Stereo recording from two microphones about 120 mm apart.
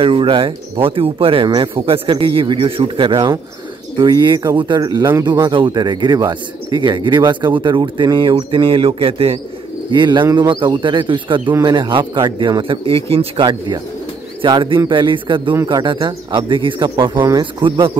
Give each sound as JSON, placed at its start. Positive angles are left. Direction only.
{"t": 0.0, "sound": "speech", "side_deg": -45}
{"t": 9.8, "sound": "speech", "side_deg": -40}
{"t": 15.5, "sound": "a man's voice", "side_deg": -30}
{"t": 15.8, "sound": "speech", "side_deg": -40}